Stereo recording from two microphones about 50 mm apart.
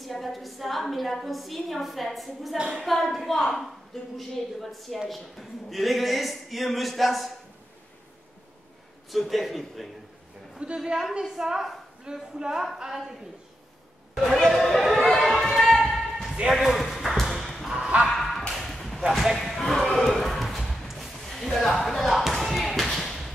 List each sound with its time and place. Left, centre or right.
0.0 s a woman's voice: centre
9.1 s a woman's voice: centre
10.6 s a woman's voice: centre
14.1 s a sound: centre
16.3 s a woman's voice: centre
16.7 s ping: centre
17.7 s dog: centre
18.1 s a sound: centre